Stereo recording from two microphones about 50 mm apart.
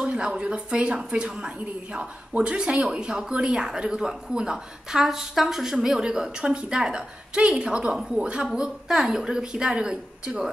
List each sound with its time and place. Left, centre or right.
0.0 s a woman's voice: centre